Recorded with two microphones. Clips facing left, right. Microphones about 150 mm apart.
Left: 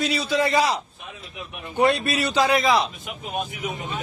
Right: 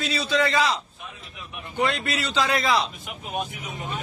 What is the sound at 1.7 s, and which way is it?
Speech, 20° left (ahead or behind).